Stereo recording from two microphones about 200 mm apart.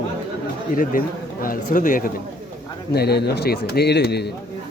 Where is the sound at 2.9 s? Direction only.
55° left (ahead or behind).